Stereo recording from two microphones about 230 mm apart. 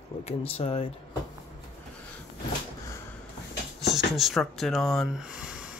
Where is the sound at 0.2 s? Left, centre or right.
Left.